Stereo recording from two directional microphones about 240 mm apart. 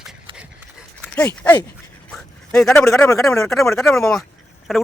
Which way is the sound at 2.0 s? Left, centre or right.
Centre.